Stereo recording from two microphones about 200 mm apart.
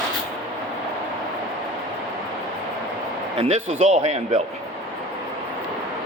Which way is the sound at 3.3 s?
35° right (ahead or behind).